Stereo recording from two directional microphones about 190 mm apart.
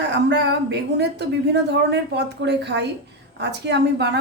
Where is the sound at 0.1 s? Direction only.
65° right (ahead or behind).